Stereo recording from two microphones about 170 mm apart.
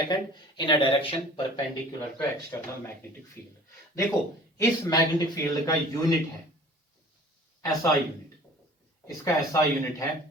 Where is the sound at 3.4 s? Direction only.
15° left (ahead or behind).